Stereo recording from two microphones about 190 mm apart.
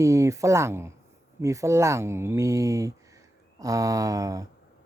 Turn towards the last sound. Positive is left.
turn(degrees=-20)  # may be behind; listen again after turning